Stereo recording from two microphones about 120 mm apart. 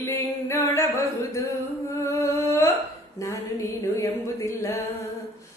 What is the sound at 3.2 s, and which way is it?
Female singing, 25° left (ahead or behind).